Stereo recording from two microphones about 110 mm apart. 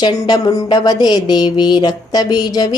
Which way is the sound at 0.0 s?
40° left (ahead or behind).